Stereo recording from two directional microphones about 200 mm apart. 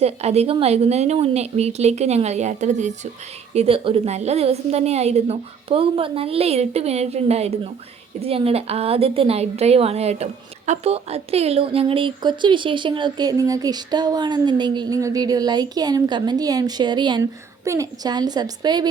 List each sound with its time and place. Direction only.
0.0 s a woman's voice: 30° right (ahead or behind)